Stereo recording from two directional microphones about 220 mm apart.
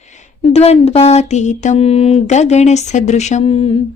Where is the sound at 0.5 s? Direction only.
30° left (ahead or behind).